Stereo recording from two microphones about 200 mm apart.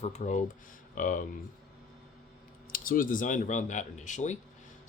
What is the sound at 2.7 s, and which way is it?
Speech, 45° left (ahead or behind).